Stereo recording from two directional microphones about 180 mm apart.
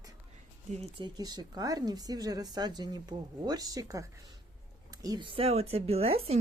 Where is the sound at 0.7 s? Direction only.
35° right (ahead or behind).